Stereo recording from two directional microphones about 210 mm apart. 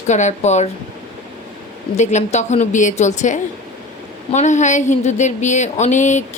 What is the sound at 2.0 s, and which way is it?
Speech, 35° left (ahead or behind).